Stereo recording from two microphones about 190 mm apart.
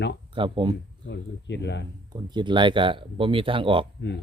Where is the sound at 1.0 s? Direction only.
65° left (ahead or behind).